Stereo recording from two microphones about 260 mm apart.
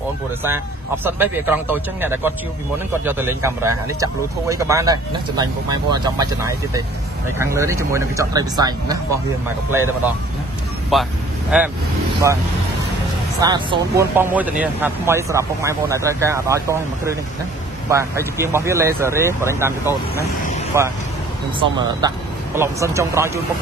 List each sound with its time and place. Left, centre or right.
1.0 s speech: centre
10.9 s speech: centre